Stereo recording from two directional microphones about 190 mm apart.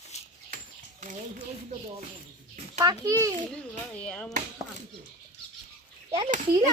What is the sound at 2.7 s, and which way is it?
Speech, 15° right (ahead or behind).